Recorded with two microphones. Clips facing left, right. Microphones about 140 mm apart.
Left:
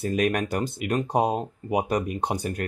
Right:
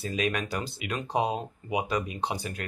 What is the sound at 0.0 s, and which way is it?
Speech, 50° left (ahead or behind).